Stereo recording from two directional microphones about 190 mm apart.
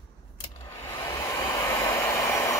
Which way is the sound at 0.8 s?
15° left (ahead or behind).